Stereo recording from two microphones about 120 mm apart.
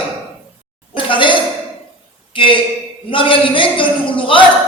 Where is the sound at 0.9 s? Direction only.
45° left (ahead or behind).